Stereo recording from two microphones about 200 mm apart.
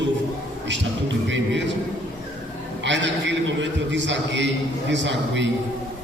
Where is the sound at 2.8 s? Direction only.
65° right (ahead or behind).